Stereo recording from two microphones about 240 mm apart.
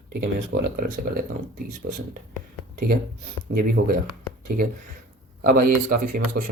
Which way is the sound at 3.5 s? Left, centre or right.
Right.